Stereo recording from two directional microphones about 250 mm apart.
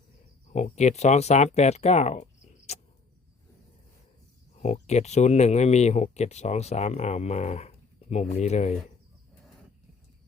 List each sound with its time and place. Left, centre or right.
0.5 s speech: left
2.7 s tick-tock: left
4.6 s speech: left